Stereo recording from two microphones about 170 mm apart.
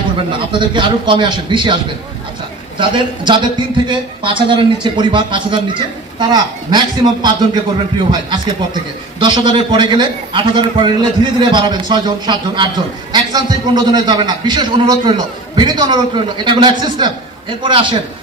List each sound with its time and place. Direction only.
0.3 s a man's voice: 30° right (ahead or behind)
9.2 s a man's voice: 25° right (ahead or behind)